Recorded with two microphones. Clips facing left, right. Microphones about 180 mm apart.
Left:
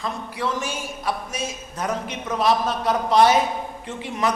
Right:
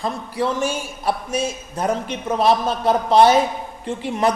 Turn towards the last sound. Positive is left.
turn(degrees=-30)  # may be behind; listen again after turning